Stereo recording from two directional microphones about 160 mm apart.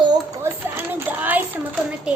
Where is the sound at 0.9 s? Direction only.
10° right (ahead or behind).